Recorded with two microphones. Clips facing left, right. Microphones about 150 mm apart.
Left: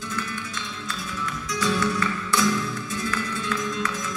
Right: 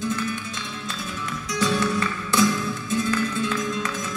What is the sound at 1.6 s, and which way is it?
Music, 25° right (ahead or behind).